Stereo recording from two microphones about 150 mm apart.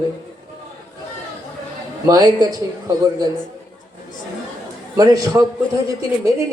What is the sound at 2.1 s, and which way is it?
A man's voice, 25° right (ahead or behind).